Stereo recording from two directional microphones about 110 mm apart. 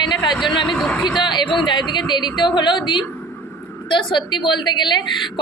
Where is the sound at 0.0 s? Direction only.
40° left (ahead or behind).